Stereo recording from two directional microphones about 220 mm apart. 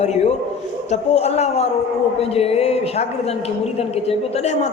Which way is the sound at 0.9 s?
30° left (ahead or behind).